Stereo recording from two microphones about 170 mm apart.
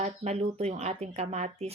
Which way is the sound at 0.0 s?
40° right (ahead or behind).